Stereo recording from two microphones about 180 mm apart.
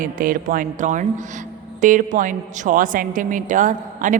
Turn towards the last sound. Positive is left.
turn(degrees=-45)  # may be behind; listen again after turning